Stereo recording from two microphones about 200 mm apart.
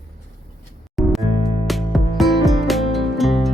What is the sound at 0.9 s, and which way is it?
Music, centre (ahead or behind).